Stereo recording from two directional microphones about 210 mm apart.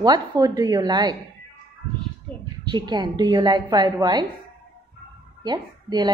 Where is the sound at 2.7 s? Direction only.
20° right (ahead or behind).